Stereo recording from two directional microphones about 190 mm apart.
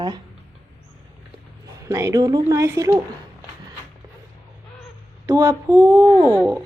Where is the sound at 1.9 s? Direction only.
15° right (ahead or behind).